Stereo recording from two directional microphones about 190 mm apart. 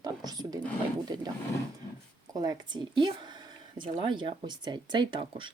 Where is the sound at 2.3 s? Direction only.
20° right (ahead or behind).